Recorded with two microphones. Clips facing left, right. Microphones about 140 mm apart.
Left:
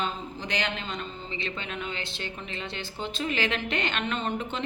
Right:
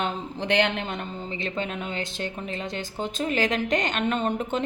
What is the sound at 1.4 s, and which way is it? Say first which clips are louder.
Speech: right 4 dB; 45° right (ahead or behind).